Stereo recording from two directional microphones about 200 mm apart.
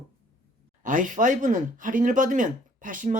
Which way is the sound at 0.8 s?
40° right (ahead or behind).